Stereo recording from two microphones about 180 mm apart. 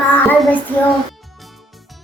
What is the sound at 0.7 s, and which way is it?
Child singing, 10° left (ahead or behind).